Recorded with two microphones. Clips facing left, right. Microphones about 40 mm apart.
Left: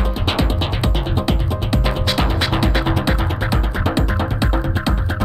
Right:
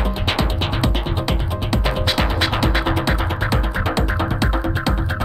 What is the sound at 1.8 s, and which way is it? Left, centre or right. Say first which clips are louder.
Music: right 1 dB; centre.